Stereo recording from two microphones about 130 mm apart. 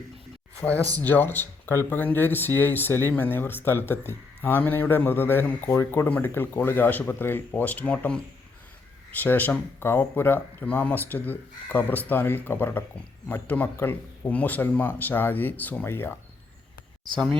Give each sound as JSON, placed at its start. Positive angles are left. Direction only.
{"t": 0.9, "sound": "speech", "side_deg": 15}
{"t": 9.2, "sound": "speech", "side_deg": 15}